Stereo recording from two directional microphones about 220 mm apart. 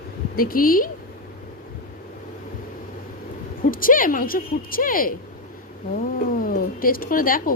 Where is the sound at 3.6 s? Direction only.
40° left (ahead or behind).